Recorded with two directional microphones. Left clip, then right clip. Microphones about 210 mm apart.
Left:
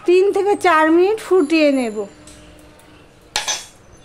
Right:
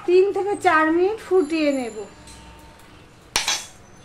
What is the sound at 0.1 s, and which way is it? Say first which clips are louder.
Speech: left 4 dB; 55° left (ahead or behind).